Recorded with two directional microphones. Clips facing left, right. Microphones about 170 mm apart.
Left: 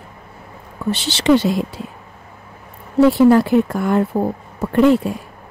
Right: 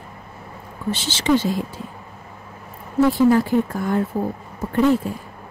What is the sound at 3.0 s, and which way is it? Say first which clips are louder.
A woman's voice: left 4 dB; 70° left (ahead or behind).